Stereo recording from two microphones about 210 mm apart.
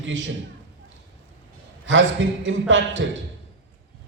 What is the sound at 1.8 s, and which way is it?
A man's voice, 65° right (ahead or behind).